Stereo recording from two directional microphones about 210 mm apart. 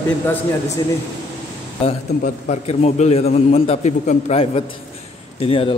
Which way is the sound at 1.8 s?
30° left (ahead or behind).